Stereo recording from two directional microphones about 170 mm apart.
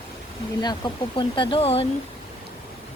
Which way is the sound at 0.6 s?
25° left (ahead or behind).